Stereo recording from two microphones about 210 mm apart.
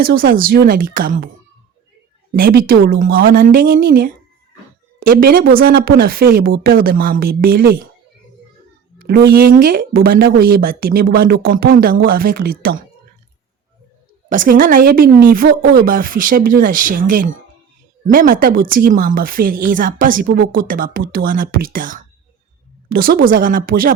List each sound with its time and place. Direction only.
0.0 s speech: 45° right (ahead or behind)
2.3 s speech: 45° right (ahead or behind)
9.0 s speech: 50° right (ahead or behind)
14.3 s a woman's voice: 40° right (ahead or behind)